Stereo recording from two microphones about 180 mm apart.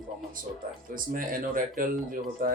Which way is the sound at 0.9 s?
50° right (ahead or behind).